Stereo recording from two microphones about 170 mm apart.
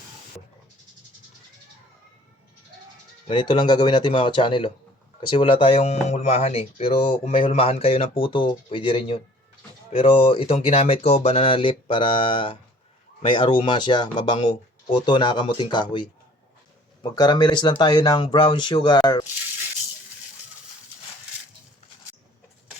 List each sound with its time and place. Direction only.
3.2 s speech: 30° left (ahead or behind)